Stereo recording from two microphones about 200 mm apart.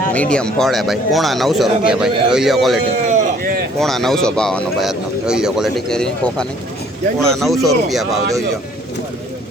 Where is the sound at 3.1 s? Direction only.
45° right (ahead or behind).